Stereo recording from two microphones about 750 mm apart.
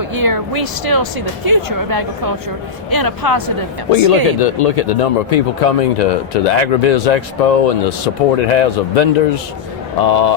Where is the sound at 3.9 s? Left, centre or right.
Left.